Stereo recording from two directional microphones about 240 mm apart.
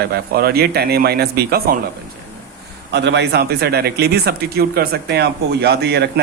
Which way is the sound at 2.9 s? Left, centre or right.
Right.